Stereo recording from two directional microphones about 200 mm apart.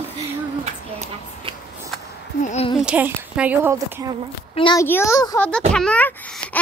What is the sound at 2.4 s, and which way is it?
Speech, 35° left (ahead or behind).